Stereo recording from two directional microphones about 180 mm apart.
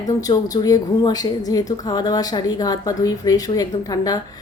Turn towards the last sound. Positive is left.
turn(degrees=20)  # may be behind; listen again after turning